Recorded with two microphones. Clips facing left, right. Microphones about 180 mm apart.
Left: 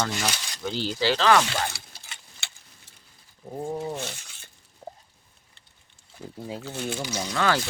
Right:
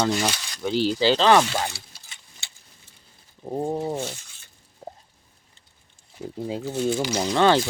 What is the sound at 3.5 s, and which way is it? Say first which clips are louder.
Speech: right 5 dB; 30° right (ahead or behind).